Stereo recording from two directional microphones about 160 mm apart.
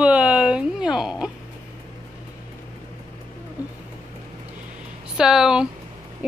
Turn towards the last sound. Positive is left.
turn(degrees=-5)  # may be behind; listen again after turning